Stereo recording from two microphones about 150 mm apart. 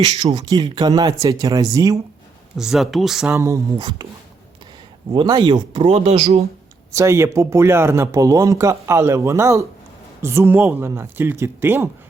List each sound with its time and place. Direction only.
0.2 s speech: 40° right (ahead or behind)
0.4 s speech: 25° right (ahead or behind)
2.6 s speech: centre (ahead or behind)
3.3 s speech: 20° right (ahead or behind)
5.1 s speech: 30° right (ahead or behind); by 6.5 s 45° right (ahead or behind)
6.9 s speech: 20° right (ahead or behind)